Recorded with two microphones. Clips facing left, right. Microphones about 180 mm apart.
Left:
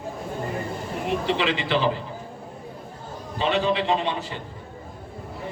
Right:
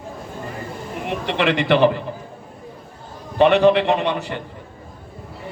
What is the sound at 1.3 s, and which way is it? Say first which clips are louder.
Speech: right 8 dB; 65° right (ahead or behind).